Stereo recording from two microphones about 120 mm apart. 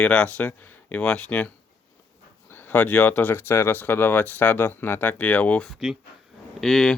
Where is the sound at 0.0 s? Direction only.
10° left (ahead or behind).